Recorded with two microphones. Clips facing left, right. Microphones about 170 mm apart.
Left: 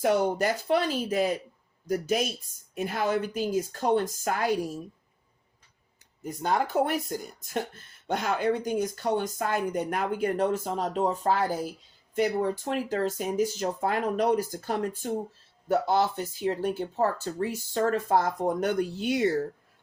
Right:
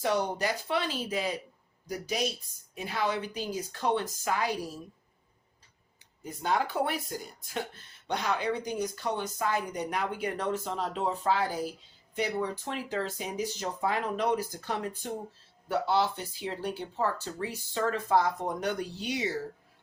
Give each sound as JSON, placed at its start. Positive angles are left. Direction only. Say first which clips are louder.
{"t": 0.0, "sound": "speech", "louder": "left 5 dB", "side_deg": 50}
{"t": 6.2, "sound": "speech", "louder": "left 2 dB", "side_deg": 45}